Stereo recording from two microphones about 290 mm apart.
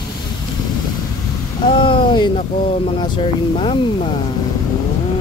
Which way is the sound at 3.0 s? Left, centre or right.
Centre.